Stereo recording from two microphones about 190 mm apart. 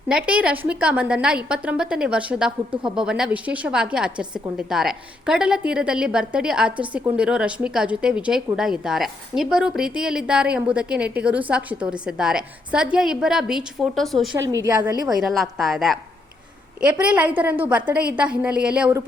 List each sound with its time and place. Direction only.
0.1 s a woman's voice: 5° right (ahead or behind)
14.5 s a woman's voice: 15° right (ahead or behind)
15.1 s a woman's voice: centre (ahead or behind)